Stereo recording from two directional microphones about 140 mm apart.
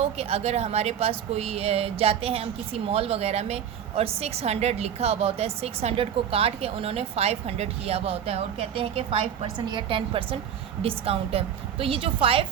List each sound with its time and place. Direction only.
0.0 s a woman's voice: 45° right (ahead or behind)